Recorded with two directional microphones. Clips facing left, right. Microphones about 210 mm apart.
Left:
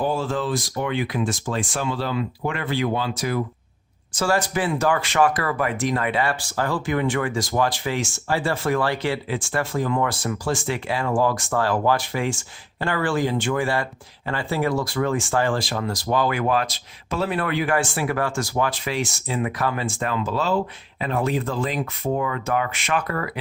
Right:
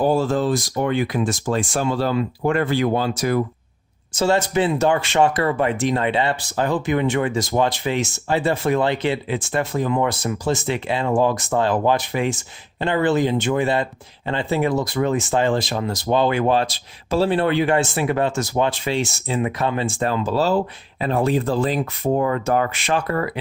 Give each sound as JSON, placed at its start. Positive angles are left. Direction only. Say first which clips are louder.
{"t": 0.0, "sound": "speech", "louder": "right 5 dB", "side_deg": -40}
{"t": 4.1, "sound": "speech", "louder": "right 4 dB", "side_deg": -25}